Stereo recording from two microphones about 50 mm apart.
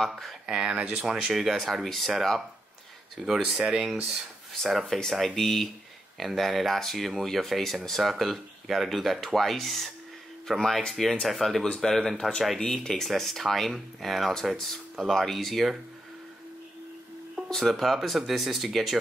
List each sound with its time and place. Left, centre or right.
0.0 s speech: centre
0.5 s speech: centre
1.3 s speech: centre
3.6 s speech: centre
4.6 s speech: centre
4.8 s speech: centre
17.5 s speech: centre